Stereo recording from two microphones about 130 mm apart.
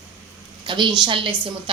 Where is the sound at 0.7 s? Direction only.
35° right (ahead or behind).